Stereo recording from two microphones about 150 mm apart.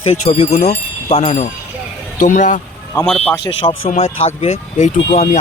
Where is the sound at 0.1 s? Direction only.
45° left (ahead or behind).